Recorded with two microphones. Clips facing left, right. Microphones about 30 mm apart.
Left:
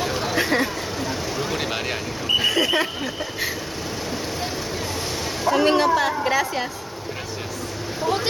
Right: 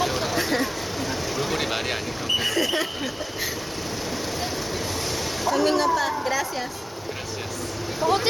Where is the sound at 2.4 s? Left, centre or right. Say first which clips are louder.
Left 4 dB; centre.